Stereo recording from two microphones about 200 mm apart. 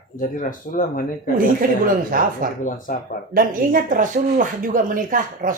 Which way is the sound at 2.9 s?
45° left (ahead or behind).